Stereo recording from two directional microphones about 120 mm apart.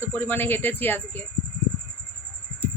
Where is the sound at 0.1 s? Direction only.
15° left (ahead or behind).